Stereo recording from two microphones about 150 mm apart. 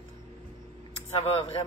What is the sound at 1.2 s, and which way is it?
Speech, 40° left (ahead or behind).